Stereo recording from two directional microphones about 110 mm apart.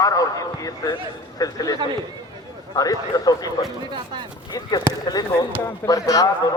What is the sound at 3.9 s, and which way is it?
Speech, 45° right (ahead or behind).